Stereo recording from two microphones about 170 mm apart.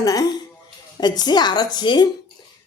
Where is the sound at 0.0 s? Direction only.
20° left (ahead or behind).